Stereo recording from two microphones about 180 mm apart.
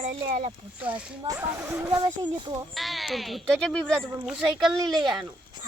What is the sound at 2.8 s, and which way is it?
Speech, centre (ahead or behind).